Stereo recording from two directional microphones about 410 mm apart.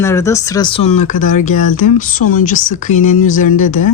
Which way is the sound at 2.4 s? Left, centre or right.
Centre.